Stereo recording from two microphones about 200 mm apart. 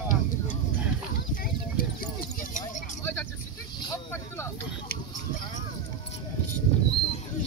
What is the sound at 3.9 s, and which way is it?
Vehicle, 15° left (ahead or behind).